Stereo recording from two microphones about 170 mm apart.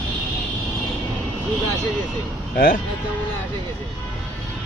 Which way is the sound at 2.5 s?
60° left (ahead or behind).